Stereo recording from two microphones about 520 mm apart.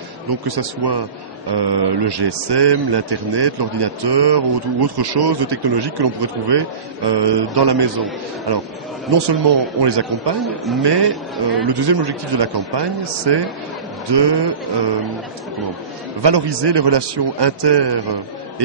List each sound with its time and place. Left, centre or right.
0.5 s a man's voice: right
9.3 s a man's voice: right
10.4 s a man's voice: centre
10.8 s a man's voice: right
16.2 s a man's voice: right